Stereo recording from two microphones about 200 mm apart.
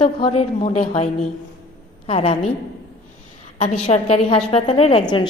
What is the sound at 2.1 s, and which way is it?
Speech, 30° left (ahead or behind).